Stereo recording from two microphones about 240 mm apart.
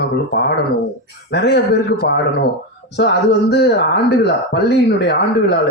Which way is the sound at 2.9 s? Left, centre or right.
Left.